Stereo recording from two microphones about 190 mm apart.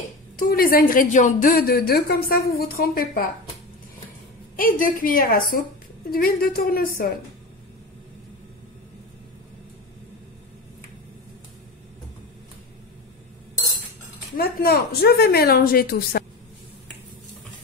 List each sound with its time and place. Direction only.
0.4 s a woman's voice: 50° left (ahead or behind)
4.6 s a woman's voice: 45° left (ahead or behind)
14.3 s a woman's voice: 55° left (ahead or behind)